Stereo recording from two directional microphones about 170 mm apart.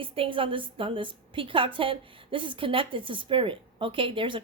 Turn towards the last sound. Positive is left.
turn(degrees=-30)  # may be behind; listen again after turning